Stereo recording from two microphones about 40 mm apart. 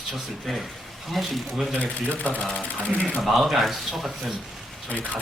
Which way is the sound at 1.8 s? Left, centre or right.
Left.